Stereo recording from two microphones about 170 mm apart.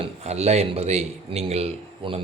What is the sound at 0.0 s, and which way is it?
Speech, 40° right (ahead or behind).